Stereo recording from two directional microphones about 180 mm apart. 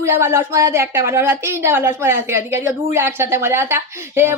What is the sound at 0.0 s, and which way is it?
A woman's voice, 15° right (ahead or behind).